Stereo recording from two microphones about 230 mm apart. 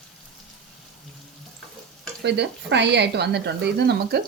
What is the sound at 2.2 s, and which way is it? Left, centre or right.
Speech, right.